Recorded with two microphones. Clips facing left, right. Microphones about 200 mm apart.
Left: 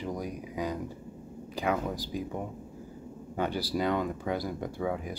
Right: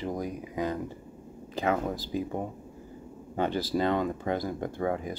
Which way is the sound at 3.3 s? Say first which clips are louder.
Right 3 dB; 10° left (ahead or behind).